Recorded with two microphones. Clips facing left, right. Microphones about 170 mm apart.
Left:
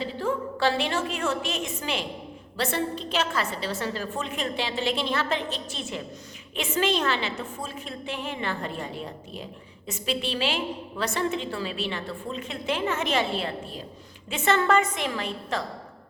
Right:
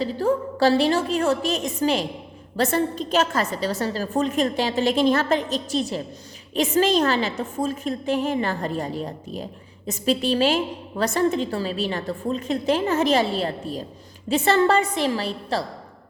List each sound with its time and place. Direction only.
0.0 s a woman's voice: 40° right (ahead or behind)